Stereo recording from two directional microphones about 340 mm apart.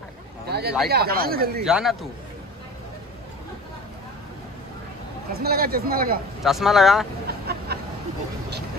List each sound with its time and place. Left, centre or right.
0.5 s a sound: right
0.8 s speech: right
1.7 s speech: centre
5.3 s speech: right
6.4 s speech: centre
7.2 s a sound: right